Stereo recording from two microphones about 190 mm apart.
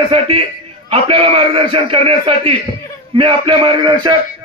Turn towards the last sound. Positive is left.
turn(degrees=-25)  # may be behind; listen again after turning